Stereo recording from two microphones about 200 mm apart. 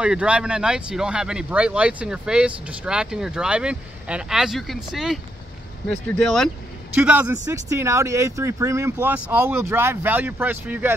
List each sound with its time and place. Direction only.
0.0 s speech: 5° right (ahead or behind)